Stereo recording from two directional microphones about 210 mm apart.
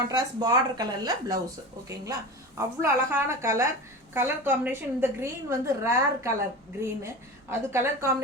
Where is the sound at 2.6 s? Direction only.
10° right (ahead or behind).